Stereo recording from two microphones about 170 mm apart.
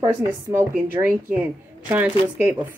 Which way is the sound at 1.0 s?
20° right (ahead or behind).